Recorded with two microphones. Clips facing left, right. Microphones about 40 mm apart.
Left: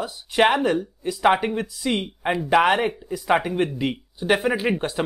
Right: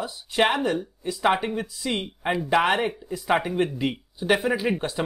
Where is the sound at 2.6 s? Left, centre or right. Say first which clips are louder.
Left 3 dB; left.